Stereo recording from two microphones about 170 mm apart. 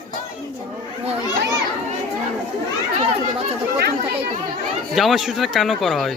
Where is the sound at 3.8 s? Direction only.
65° right (ahead or behind).